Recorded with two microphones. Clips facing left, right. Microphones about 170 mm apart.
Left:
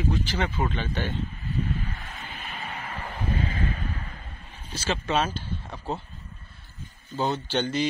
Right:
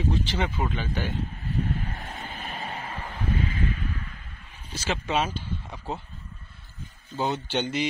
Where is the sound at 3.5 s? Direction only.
40° left (ahead or behind).